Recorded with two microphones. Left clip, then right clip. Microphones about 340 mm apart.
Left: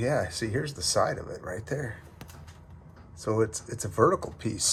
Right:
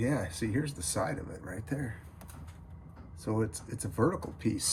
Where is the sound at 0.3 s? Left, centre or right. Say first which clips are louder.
Left 3 dB; centre.